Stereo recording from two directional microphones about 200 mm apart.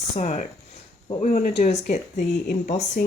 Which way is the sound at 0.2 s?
30° left (ahead or behind).